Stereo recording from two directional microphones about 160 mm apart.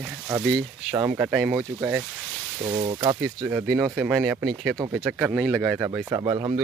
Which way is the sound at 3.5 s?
5° right (ahead or behind).